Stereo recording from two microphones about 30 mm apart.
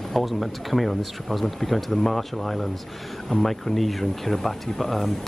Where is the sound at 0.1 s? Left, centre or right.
Centre.